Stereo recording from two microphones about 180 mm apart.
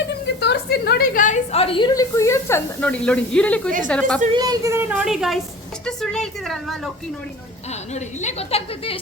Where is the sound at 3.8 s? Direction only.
5° left (ahead or behind).